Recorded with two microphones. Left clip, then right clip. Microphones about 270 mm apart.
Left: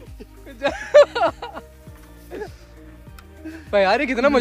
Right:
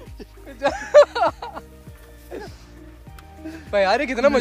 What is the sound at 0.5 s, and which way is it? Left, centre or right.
Chuckle, centre.